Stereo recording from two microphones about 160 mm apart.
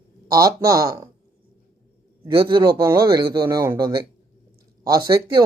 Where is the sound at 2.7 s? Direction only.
15° right (ahead or behind).